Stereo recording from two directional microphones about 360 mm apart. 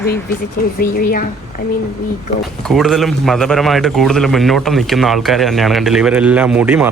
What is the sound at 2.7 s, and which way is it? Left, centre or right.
A man's voice, centre.